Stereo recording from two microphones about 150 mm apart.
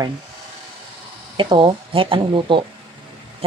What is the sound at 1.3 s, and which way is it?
Speech, 35° right (ahead or behind).